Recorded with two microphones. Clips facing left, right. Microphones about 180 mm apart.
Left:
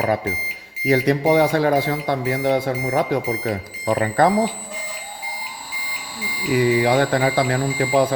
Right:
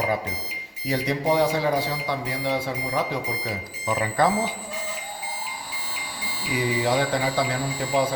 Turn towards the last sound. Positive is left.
turn(degrees=60)  # may be behind; listen again after turning